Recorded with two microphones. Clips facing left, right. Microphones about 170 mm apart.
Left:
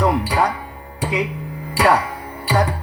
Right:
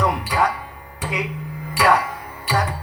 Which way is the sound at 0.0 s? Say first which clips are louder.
Left 3 dB; 30° left (ahead or behind).